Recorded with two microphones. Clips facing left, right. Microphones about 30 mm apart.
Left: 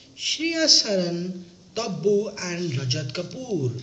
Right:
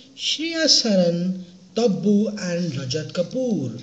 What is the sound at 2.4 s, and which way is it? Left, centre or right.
Speech, left.